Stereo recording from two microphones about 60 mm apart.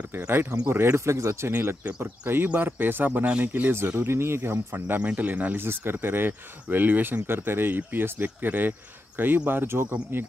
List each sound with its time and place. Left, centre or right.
0.7 s speech: right
1.5 s speech: right
1.9 s speech: right
3.7 s speech: right
5.6 s speech: right